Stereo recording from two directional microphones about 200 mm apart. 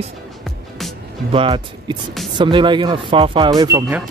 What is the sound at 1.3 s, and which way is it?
Speech, 25° right (ahead or behind).